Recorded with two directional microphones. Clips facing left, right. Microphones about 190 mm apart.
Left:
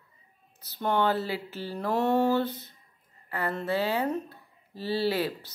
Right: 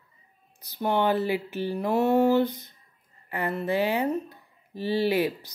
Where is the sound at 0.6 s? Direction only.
15° right (ahead or behind).